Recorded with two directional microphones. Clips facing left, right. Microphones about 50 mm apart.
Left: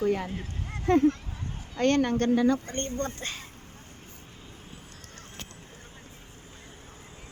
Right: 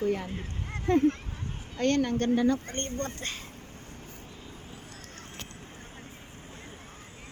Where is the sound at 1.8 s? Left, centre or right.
Left.